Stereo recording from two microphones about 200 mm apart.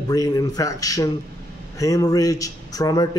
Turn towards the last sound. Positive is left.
turn(degrees=20)  # may be behind; listen again after turning